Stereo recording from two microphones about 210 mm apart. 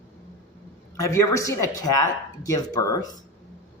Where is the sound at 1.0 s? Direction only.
15° left (ahead or behind).